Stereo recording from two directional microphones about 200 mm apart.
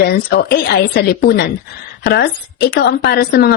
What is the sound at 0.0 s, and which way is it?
A woman's voice, 50° left (ahead or behind).